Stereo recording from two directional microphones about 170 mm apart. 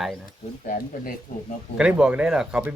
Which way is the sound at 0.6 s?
50° left (ahead or behind).